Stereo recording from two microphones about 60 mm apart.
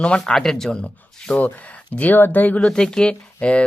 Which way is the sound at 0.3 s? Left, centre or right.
Centre.